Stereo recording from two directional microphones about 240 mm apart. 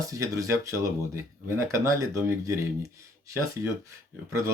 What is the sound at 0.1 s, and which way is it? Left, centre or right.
Speech, centre.